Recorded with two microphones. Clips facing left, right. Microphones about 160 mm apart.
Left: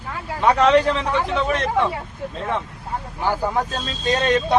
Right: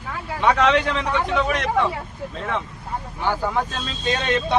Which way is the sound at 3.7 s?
40° left (ahead or behind).